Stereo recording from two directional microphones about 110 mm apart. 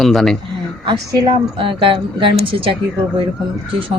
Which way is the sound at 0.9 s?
50° right (ahead or behind).